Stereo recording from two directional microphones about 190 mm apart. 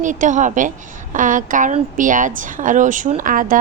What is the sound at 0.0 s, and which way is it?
A woman's voice, 40° right (ahead or behind).